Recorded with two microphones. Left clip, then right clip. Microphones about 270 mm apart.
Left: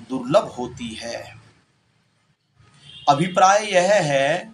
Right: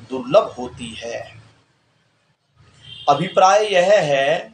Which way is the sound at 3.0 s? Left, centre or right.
Left.